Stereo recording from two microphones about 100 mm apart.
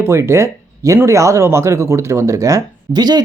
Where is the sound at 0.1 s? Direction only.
30° right (ahead or behind).